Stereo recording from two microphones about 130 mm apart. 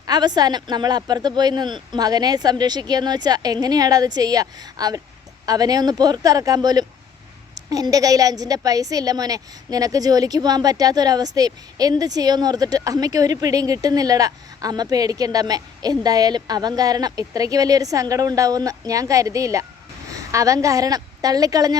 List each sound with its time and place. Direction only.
0.0 s a woman's voice: 30° right (ahead or behind)